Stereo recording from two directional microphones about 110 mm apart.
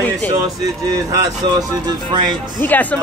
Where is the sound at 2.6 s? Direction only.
15° left (ahead or behind).